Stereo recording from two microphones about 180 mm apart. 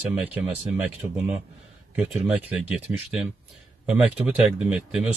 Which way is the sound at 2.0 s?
5° right (ahead or behind).